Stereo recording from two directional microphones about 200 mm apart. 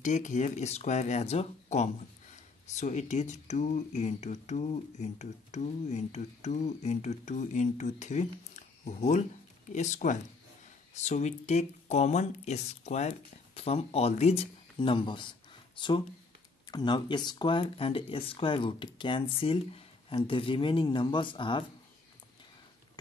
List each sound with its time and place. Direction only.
0.0 s speech: 40° left (ahead or behind)